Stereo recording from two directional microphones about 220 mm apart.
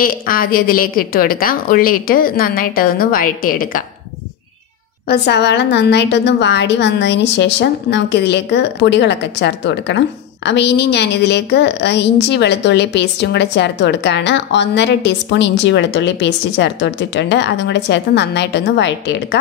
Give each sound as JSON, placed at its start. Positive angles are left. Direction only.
{"t": 0.0, "sound": "a woman's voice", "side_deg": 40}
{"t": 5.0, "sound": "a woman's voice", "side_deg": 45}